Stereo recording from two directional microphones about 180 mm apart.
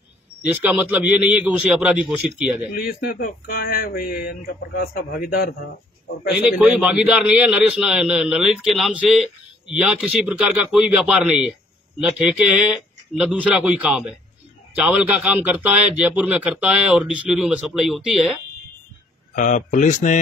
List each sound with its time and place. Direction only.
0.5 s a man's voice: 10° right (ahead or behind)
2.7 s speech: 55° left (ahead or behind)
6.4 s a man's voice: 10° right (ahead or behind)
19.3 s speech: 45° left (ahead or behind)